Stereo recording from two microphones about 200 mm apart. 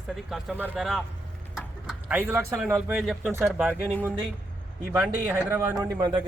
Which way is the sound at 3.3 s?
10° right (ahead or behind).